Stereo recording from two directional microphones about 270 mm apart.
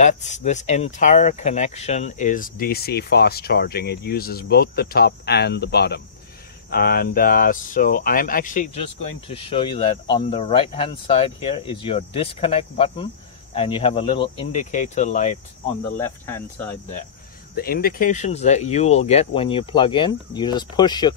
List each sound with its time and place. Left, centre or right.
0.0 s speech: left
16.0 s speech: centre
17.6 s speech: left; by 21.1 s centre